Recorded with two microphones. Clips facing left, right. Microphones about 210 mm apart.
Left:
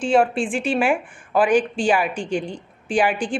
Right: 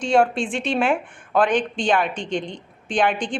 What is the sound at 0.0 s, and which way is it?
A woman's voice, 5° left (ahead or behind).